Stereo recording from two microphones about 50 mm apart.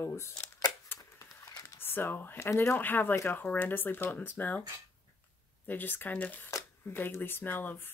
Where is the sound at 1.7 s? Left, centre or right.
Left.